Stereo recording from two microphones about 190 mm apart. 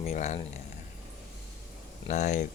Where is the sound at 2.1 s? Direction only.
40° left (ahead or behind).